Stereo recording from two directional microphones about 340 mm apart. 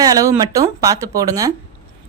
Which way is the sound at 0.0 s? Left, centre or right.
Centre.